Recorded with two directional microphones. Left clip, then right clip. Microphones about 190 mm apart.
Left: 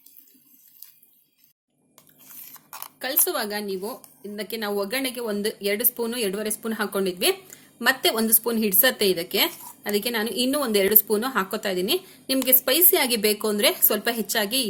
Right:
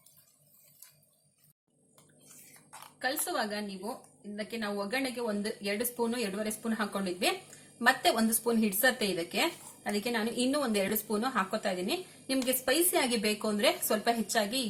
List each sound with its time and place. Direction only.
2.5 s speech: 45° left (ahead or behind)